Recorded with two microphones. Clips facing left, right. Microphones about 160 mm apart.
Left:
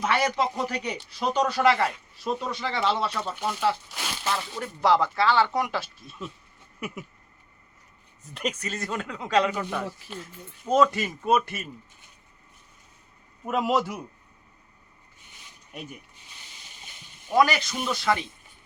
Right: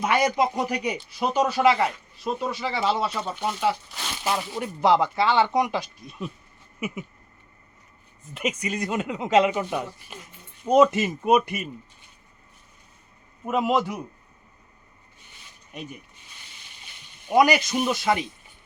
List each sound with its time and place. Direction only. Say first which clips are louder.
0.0 s a man's voice: right 3 dB; 10° right (ahead or behind)
4.2 s speech: right 4 dB; 25° right (ahead or behind)
6.7 s a sound: right 4 dB; 5° right (ahead or behind)
8.3 s a man's voice: right 3 dB; 5° right (ahead or behind)
13.4 s speech: right 2 dB; centre (ahead or behind)
15.7 s speech: right 2 dB; centre (ahead or behind)
17.2 s a man's voice: right 3 dB; 20° right (ahead or behind)